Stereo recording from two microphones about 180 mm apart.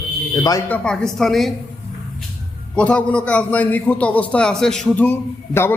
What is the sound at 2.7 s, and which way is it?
A man's voice, 5° left (ahead or behind).